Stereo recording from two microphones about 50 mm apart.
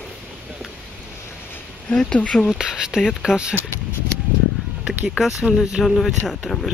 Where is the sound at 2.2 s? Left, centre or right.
Left.